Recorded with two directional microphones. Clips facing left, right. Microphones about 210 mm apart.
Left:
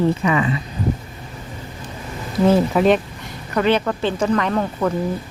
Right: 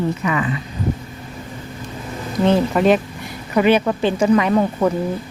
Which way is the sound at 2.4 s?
5° left (ahead or behind).